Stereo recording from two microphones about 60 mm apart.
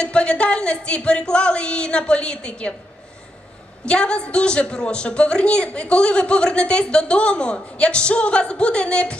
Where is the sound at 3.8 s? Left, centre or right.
Centre.